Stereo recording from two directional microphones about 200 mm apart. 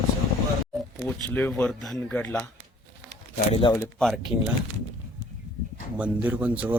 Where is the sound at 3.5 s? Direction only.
25° left (ahead or behind).